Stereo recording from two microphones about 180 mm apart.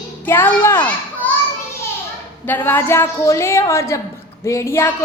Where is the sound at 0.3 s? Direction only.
15° left (ahead or behind).